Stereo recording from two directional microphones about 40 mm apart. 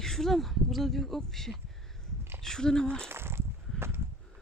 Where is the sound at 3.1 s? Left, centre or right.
Right.